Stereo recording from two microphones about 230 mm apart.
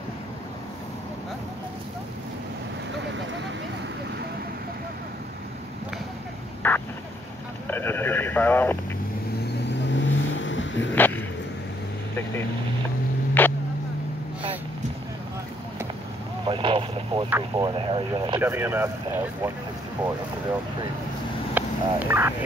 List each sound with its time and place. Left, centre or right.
6.6 s vehicle: centre
7.6 s a sound: centre
9.7 s vehicle: left
11.0 s a sound: centre
13.4 s vehicle: centre
16.4 s vehicle: right
17.3 s speech: centre
18.4 s speech: centre
21.5 s fowl: centre